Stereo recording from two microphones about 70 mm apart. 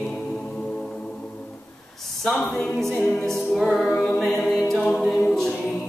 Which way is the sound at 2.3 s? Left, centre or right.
Centre.